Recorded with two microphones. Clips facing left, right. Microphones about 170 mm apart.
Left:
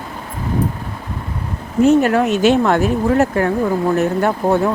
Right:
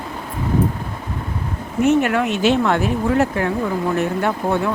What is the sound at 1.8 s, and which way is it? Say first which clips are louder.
Speech: left 4 dB; 35° left (ahead or behind).